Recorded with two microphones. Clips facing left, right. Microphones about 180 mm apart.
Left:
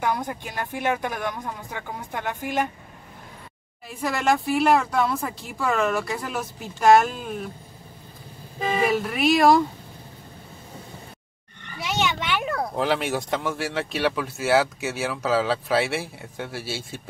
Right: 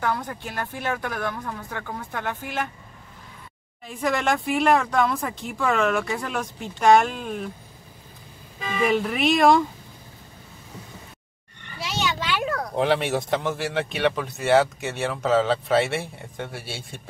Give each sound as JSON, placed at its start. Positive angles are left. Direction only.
{"t": 0.0, "sound": "speech", "side_deg": 15}
{"t": 3.9, "sound": "speech", "side_deg": 0}
{"t": 8.5, "sound": "speech", "side_deg": 35}
{"t": 8.8, "sound": "speech", "side_deg": 0}
{"t": 12.7, "sound": "speech", "side_deg": 0}